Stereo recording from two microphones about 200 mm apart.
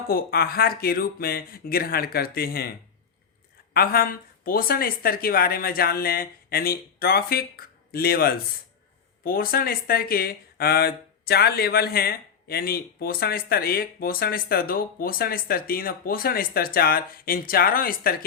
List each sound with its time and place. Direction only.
0.1 s speech: 50° left (ahead or behind)
3.8 s speech: 45° left (ahead or behind)